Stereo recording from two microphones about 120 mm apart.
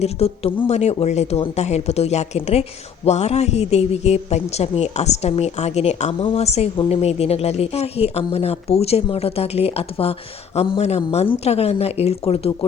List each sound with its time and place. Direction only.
0.0 s speech: 60° left (ahead or behind)
6.1 s speech: 50° left (ahead or behind)